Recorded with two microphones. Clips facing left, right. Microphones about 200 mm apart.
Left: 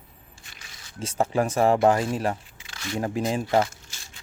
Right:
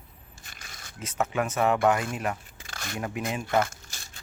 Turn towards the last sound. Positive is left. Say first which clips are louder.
# left 2 dB
turn(degrees=-45)  # may be behind; listen again after turning